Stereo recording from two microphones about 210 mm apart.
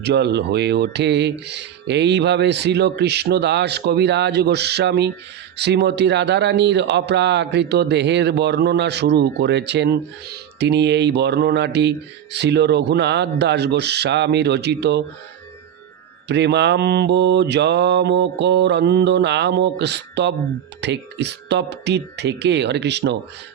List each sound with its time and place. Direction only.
0.0 s a man's voice: 55° right (ahead or behind)
16.3 s mantra: 55° right (ahead or behind)